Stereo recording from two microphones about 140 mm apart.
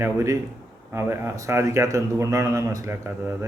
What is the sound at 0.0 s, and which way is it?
A man's voice, 20° right (ahead or behind).